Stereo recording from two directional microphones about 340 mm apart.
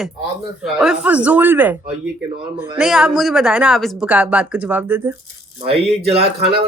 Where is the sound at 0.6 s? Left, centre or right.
Centre.